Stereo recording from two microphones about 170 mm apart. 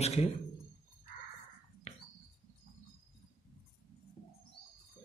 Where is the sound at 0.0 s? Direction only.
40° left (ahead or behind).